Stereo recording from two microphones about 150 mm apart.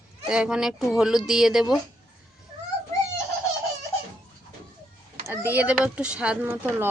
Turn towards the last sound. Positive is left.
turn(degrees=-15)  # may be behind; listen again after turning